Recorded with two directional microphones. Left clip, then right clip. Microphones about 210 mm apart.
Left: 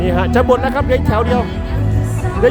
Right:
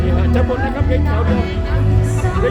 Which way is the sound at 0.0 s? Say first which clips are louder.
Left 5 dB; 30° left (ahead or behind).